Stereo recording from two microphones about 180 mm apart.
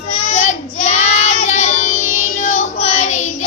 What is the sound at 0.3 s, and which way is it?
Child singing, 40° left (ahead or behind).